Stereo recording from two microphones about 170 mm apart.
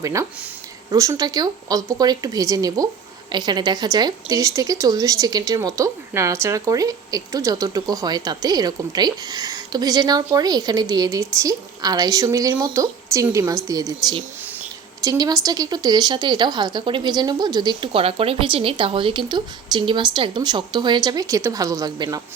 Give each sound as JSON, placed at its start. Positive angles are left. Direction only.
{"t": 0.0, "sound": "a woman's voice", "side_deg": -20}